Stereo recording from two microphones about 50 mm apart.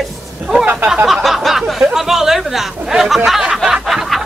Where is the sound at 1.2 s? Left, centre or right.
Centre.